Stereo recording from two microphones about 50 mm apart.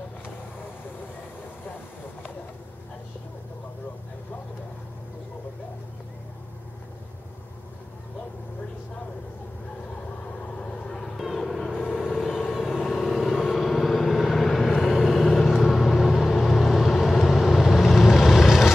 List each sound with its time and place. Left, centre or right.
10.2 s vehicle: left
11.1 s vehicle: centre
11.8 s vehicle: centre
12.1 s vehicle: centre